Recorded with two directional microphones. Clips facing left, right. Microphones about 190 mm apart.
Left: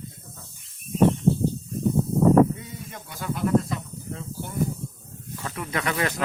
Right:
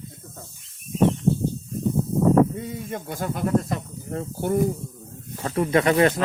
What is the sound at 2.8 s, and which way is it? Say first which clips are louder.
Speech: right 1 dB; 50° right (ahead or behind).